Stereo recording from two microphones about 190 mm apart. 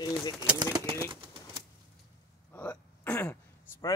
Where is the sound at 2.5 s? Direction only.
10° left (ahead or behind).